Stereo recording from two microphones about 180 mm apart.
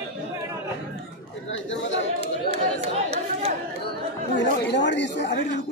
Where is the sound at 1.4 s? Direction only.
90° left.